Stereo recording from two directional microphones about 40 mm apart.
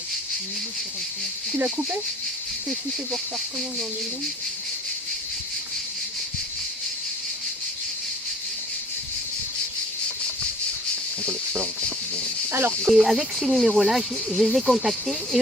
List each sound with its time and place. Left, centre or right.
11.3 s snake: right
12.9 s speech: centre